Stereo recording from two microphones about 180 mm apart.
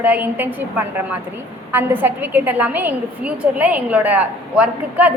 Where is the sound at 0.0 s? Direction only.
10° right (ahead or behind).